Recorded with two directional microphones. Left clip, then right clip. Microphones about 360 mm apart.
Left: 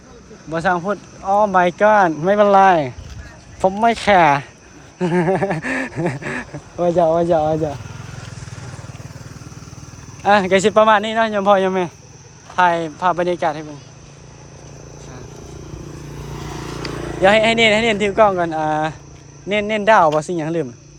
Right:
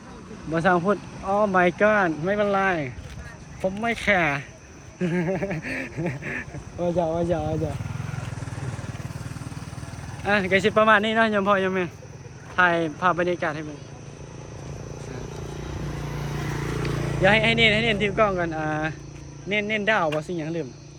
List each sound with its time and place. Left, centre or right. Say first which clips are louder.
0.5 s speech: left 2 dB; centre
10.2 s speech: left 8 dB; centre
16.2 s speech: left 2 dB; centre